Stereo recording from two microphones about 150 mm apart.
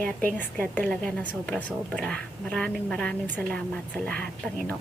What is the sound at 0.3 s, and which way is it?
A woman's voice, 10° left (ahead or behind).